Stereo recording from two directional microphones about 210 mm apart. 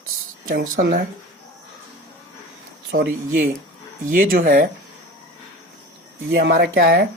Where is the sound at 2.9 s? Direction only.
45° right (ahead or behind).